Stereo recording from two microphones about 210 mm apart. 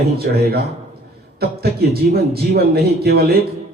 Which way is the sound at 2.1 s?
50° right (ahead or behind).